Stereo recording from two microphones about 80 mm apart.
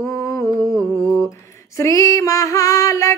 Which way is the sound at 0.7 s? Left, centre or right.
Centre.